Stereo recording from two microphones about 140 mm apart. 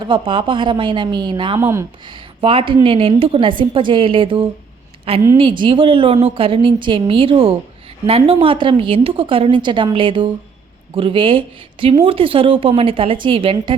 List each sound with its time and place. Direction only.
0.0 s a woman's voice: 40° right (ahead or behind)
1.5 s speech: 20° right (ahead or behind)
2.0 s a woman's voice: 40° right (ahead or behind)